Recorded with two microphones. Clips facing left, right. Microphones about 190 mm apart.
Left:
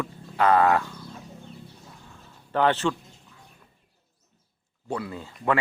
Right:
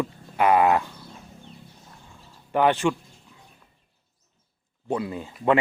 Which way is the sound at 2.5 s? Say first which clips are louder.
Right 2 dB; 15° right (ahead or behind).